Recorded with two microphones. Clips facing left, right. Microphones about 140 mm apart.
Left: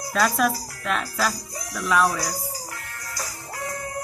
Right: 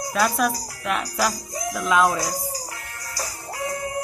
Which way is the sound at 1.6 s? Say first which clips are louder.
Right 2 dB; 20° right (ahead or behind).